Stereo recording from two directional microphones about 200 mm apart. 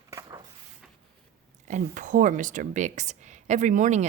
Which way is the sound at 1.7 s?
40° right (ahead or behind).